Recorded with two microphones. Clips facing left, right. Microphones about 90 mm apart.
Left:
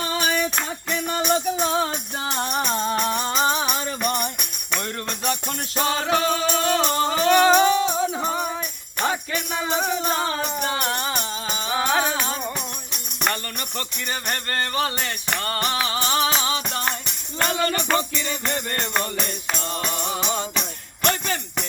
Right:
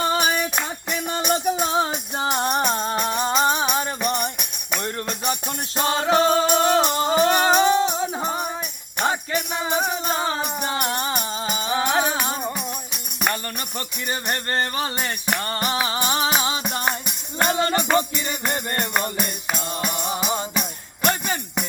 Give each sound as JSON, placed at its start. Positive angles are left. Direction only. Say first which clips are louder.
{"t": 0.2, "sound": "music", "louder": "right 1 dB", "side_deg": -15}
{"t": 5.8, "sound": "music", "louder": "right 3 dB", "side_deg": -30}
{"t": 9.0, "sound": "jingle bell", "louder": "right 2 dB", "side_deg": -25}
{"t": 9.6, "sound": "music", "louder": "left 2 dB", "side_deg": -15}
{"t": 14.6, "sound": "music", "louder": "even", "side_deg": -30}